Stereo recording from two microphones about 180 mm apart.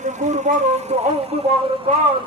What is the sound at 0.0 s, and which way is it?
A man's voice, 40° right (ahead or behind).